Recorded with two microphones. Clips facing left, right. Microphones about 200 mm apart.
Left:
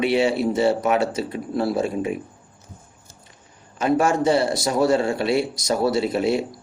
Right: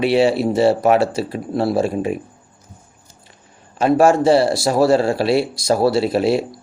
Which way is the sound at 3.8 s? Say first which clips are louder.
Right 6 dB; 30° right (ahead or behind).